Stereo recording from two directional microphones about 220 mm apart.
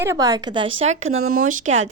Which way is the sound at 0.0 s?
15° right (ahead or behind).